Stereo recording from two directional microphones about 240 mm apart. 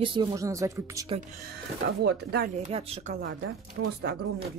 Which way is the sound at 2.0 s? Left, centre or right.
Right.